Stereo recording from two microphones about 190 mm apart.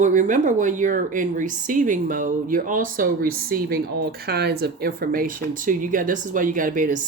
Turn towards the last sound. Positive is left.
turn(degrees=-45)  # may be behind; listen again after turning